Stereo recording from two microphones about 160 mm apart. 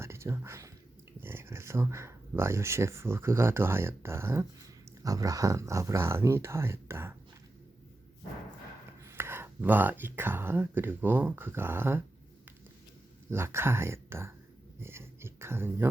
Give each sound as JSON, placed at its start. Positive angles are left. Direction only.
{"t": 0.0, "sound": "whispering", "side_deg": -15}
{"t": 1.2, "sound": "speech", "side_deg": -15}
{"t": 9.0, "sound": "speech", "side_deg": -15}
{"t": 13.3, "sound": "speech", "side_deg": -15}
{"t": 14.8, "sound": "a sound", "side_deg": -15}